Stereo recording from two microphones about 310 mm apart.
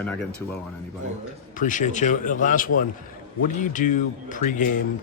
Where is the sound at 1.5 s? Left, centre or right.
Left.